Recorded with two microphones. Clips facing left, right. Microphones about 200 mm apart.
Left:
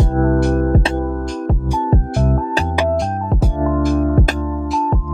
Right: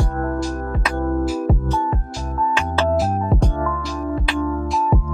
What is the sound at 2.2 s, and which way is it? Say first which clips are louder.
Music: left 7 dB; 60° left (ahead or behind).